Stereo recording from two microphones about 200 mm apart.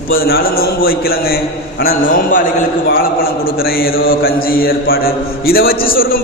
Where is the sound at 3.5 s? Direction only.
50° left (ahead or behind).